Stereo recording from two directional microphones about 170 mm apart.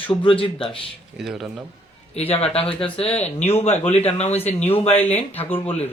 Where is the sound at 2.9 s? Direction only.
35° left (ahead or behind).